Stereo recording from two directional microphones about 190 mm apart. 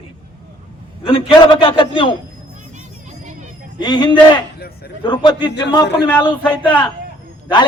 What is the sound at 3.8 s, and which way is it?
A man's voice, 20° left (ahead or behind).